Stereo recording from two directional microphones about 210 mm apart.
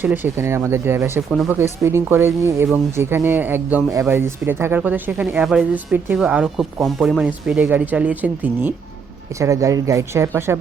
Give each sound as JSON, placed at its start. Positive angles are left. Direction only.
{"t": 0.0, "sound": "speech", "side_deg": -10}